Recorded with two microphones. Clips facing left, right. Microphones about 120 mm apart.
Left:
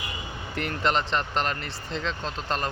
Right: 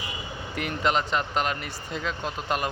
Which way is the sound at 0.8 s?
5° right (ahead or behind).